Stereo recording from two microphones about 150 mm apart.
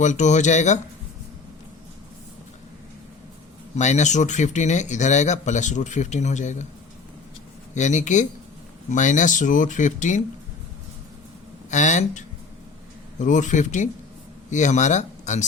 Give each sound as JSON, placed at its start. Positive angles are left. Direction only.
{"t": 0.0, "sound": "speech", "side_deg": 55}
{"t": 3.8, "sound": "speech", "side_deg": 50}
{"t": 7.7, "sound": "speech", "side_deg": 55}
{"t": 11.7, "sound": "speech", "side_deg": 55}